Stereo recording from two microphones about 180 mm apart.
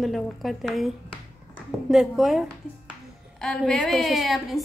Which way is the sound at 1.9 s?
Centre (ahead or behind).